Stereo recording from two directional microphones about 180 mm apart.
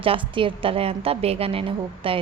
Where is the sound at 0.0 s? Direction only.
30° right (ahead or behind).